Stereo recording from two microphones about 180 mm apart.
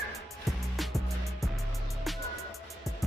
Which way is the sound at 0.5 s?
Centre (ahead or behind).